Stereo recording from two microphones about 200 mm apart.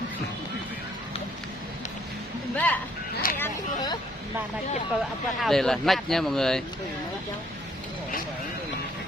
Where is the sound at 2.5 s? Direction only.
5° left (ahead or behind).